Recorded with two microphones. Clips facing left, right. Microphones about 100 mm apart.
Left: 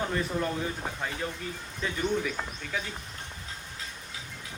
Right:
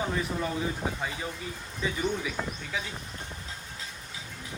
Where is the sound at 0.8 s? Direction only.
5° right (ahead or behind).